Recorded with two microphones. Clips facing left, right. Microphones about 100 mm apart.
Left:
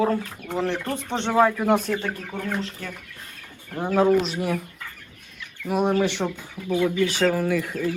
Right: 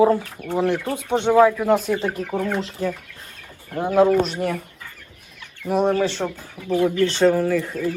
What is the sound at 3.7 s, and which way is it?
Speech, 5° right (ahead or behind).